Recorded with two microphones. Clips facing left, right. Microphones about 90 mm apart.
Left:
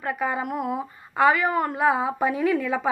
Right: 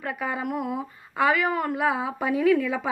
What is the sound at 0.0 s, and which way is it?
Speech, 30° left (ahead or behind).